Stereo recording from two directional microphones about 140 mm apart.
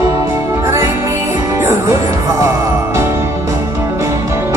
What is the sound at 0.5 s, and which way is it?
Music, 20° right (ahead or behind).